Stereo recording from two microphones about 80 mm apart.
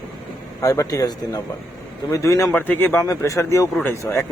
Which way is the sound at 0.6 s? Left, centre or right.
Left.